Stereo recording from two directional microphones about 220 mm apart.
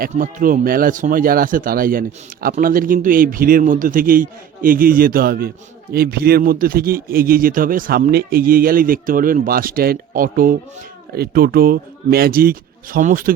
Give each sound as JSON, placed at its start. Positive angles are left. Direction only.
{"t": 0.0, "sound": "speech", "side_deg": -40}